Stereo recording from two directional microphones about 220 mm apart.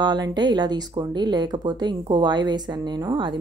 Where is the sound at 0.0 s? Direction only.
20° right (ahead or behind).